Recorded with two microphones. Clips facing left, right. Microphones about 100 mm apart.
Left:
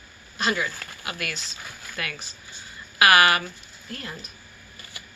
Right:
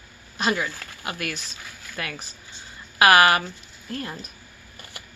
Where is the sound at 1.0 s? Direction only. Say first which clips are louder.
Right 2 dB; 35° right (ahead or behind).